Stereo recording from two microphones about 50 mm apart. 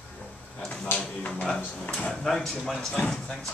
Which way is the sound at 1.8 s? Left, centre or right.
Left.